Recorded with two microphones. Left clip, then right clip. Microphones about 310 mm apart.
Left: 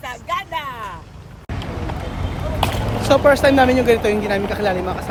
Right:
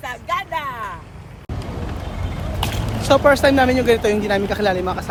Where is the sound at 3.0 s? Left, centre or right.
Centre.